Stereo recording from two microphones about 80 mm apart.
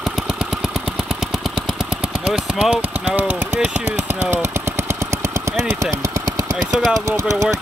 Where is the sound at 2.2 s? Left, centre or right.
Centre.